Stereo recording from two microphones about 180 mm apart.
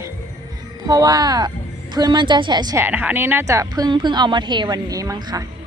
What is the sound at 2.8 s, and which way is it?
A woman's voice, 10° right (ahead or behind).